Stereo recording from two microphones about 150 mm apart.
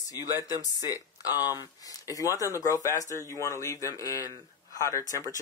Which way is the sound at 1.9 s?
25° left (ahead or behind).